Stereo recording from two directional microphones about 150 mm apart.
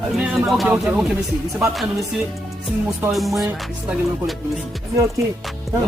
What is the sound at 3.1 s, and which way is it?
Speech, centre (ahead or behind).